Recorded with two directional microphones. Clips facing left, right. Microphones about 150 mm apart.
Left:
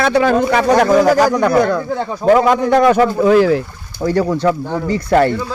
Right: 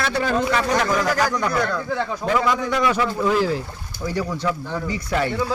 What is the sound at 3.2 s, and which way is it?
Speech, 60° left (ahead or behind).